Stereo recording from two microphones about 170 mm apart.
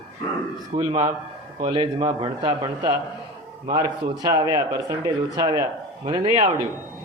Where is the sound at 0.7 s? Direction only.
40° right (ahead or behind).